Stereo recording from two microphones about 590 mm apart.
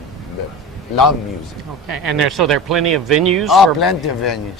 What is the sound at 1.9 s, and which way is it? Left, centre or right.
Speech, right.